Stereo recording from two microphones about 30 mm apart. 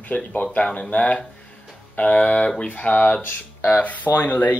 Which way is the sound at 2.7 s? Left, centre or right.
Left.